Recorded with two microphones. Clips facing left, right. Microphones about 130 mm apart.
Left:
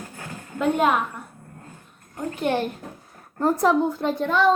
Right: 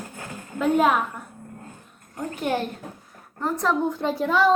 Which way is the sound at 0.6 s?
Centre (ahead or behind).